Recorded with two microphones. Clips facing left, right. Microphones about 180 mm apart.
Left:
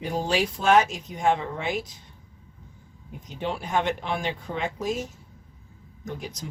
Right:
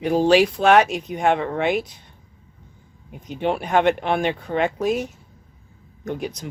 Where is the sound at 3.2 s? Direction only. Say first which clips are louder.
Right 7 dB; 60° right (ahead or behind).